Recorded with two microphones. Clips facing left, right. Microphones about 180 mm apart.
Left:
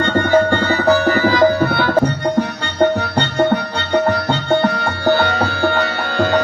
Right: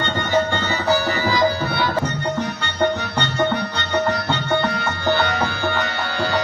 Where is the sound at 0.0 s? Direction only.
50° left (ahead or behind).